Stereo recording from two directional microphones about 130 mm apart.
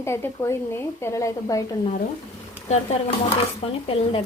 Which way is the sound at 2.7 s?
50° left (ahead or behind).